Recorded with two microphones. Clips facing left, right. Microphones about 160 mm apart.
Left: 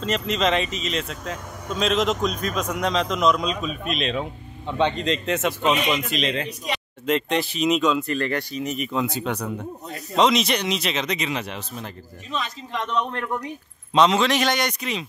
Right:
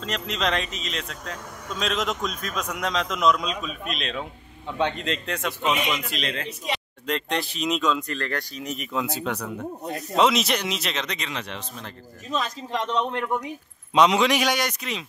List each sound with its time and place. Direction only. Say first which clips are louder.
0.0 s speech: left 5 dB; centre (ahead or behind)
12.3 s a man's voice: right 2 dB; 40° right (ahead or behind)
13.2 s a man's voice: right 1 dB; 5° right (ahead or behind)